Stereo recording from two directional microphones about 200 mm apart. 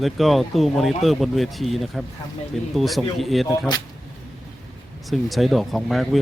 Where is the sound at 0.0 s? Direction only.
Centre (ahead or behind).